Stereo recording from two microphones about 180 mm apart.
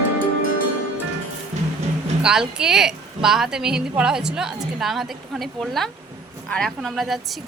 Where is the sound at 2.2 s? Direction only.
5° right (ahead or behind).